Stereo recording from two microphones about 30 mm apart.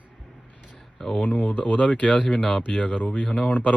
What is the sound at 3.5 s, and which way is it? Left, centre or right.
Speech, left.